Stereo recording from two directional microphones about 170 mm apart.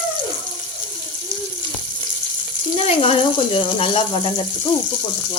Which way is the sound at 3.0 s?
30° left (ahead or behind).